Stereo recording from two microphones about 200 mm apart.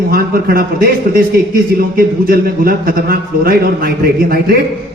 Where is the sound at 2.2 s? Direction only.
45° right (ahead or behind).